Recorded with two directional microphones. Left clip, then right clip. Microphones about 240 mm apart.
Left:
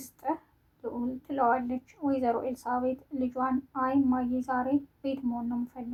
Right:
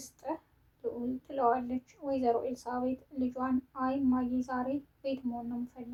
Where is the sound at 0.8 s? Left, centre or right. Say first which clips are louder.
Left 1 dB; left.